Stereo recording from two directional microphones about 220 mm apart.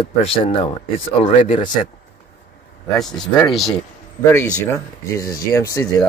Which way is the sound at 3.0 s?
Centre (ahead or behind).